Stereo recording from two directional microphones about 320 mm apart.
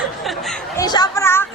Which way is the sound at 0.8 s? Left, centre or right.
Centre.